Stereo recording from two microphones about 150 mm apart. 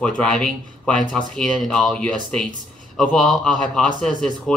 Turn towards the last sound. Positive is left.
turn(degrees=10)  # may be behind; listen again after turning